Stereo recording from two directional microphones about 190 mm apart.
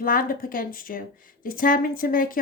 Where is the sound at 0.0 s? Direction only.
45° left (ahead or behind).